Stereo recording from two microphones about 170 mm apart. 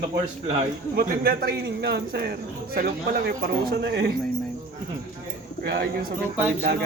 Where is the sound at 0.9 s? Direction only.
65° right (ahead or behind).